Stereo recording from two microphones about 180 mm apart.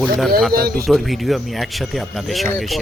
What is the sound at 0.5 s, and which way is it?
Speech, 60° right (ahead or behind).